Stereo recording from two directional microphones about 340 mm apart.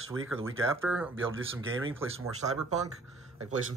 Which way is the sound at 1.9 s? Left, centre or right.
Centre.